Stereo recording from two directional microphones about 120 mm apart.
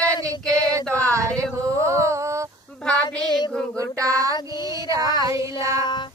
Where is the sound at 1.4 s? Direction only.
25° right (ahead or behind).